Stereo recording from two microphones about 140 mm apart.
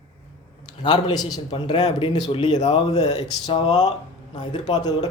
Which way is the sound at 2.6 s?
45° left (ahead or behind).